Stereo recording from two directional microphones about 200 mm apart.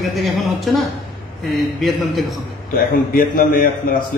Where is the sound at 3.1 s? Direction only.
45° left (ahead or behind).